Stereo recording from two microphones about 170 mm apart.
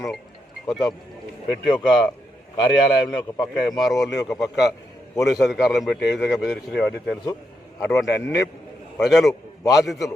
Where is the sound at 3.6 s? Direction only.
Centre (ahead or behind).